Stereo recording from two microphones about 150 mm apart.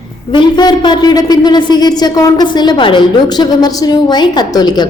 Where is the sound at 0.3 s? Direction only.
30° left (ahead or behind).